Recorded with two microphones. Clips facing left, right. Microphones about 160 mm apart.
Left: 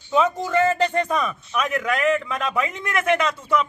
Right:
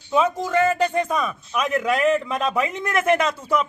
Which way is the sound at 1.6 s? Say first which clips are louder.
Right 2 dB; 30° right (ahead or behind).